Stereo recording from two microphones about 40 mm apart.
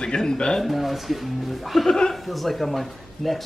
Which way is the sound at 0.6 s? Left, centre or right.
Centre.